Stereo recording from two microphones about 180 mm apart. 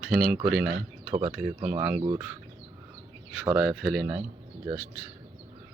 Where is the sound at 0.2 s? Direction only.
55° right (ahead or behind).